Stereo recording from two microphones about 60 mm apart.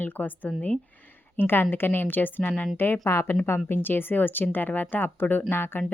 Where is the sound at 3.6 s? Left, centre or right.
Left.